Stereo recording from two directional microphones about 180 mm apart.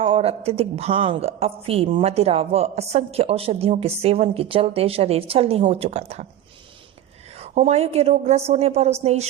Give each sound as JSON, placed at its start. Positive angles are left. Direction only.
{"t": 0.0, "sound": "a woman's voice", "side_deg": -30}
{"t": 7.3, "sound": "a woman's voice", "side_deg": -40}